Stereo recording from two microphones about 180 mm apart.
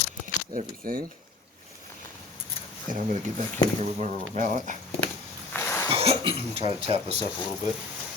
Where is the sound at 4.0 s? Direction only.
45° right (ahead or behind).